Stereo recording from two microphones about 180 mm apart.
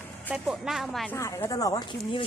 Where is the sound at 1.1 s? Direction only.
15° left (ahead or behind).